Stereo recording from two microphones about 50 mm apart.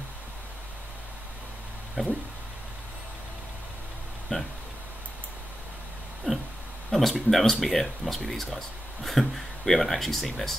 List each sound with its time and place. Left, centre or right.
2.0 s speech: centre
4.3 s speech: centre
6.3 s a sound: centre
6.9 s speech: centre